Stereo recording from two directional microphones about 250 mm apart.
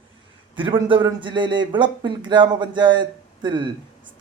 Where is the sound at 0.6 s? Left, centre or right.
Centre.